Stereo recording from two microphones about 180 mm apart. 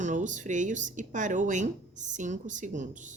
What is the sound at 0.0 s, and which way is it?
A woman's voice, 45° right (ahead or behind).